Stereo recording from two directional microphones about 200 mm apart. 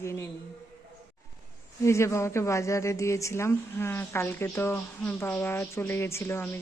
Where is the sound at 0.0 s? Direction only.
15° left (ahead or behind).